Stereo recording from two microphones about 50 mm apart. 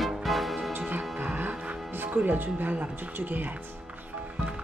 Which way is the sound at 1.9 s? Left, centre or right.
Right.